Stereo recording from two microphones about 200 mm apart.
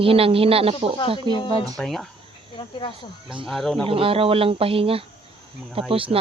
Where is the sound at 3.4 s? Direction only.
Centre (ahead or behind).